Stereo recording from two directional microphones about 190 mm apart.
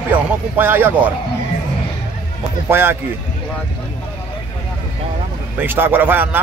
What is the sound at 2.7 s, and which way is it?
Speech, 10° right (ahead or behind).